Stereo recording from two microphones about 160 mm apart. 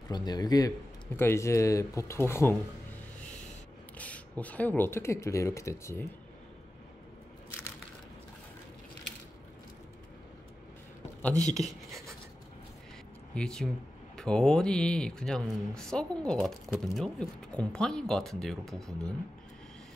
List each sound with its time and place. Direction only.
0.1 s speech: 25° left (ahead or behind)
4.0 s speech: 10° left (ahead or behind)
11.4 s speech: centre (ahead or behind)
13.3 s speech: 5° left (ahead or behind)